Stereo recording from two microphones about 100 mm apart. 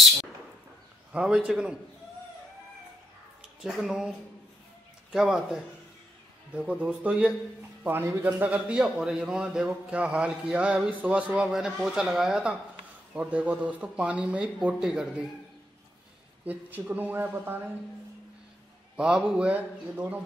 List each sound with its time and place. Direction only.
1.1 s a man's voice: 5° right (ahead or behind)
3.6 s a man's voice: 5° right (ahead or behind)
5.1 s a man's voice: 5° right (ahead or behind)
16.4 s speech: 20° right (ahead or behind)
18.9 s a man's voice: 10° right (ahead or behind)